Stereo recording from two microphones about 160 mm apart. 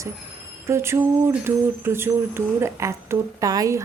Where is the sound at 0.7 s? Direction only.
15° right (ahead or behind).